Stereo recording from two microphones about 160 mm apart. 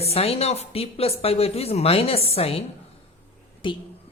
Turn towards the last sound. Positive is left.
turn(degrees=30)  # may be behind; listen again after turning